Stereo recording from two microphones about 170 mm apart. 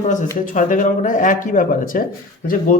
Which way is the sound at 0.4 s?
50° left (ahead or behind).